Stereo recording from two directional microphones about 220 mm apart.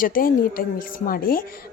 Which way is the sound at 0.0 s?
40° left (ahead or behind).